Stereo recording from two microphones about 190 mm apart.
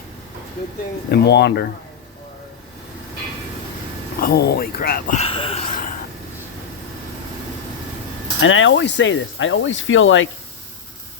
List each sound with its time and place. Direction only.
1.1 s speech: 60° left (ahead or behind)
4.2 s speech: 55° left (ahead or behind)
5.2 s speech: 30° left (ahead or behind)
8.4 s speech: 90° left